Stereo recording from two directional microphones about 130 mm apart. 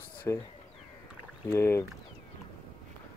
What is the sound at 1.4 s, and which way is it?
Speech, 20° left (ahead or behind).